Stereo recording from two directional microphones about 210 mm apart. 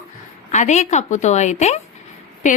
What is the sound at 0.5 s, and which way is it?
A woman's voice, 35° left (ahead or behind).